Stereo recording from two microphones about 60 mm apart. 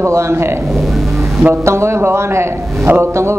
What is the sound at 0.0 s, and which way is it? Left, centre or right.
Speech, right.